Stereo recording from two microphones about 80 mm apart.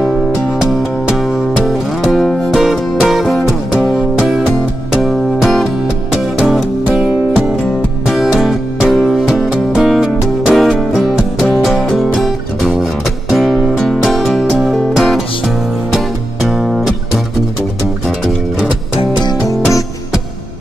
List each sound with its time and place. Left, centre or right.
0.6 s music: centre
8.1 s music: centre
13.3 s music: centre
19.1 s music: left